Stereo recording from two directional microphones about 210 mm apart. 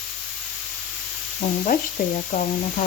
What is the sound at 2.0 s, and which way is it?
Speech, 40° left (ahead or behind).